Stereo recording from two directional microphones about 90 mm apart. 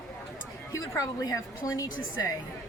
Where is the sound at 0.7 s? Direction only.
40° left (ahead or behind).